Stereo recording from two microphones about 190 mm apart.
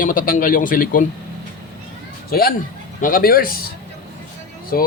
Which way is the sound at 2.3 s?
50° left (ahead or behind).